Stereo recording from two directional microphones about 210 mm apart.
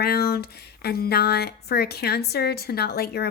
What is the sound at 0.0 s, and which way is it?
Speech, 50° left (ahead or behind).